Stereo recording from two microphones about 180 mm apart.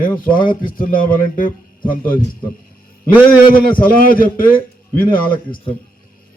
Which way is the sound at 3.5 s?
50° left (ahead or behind).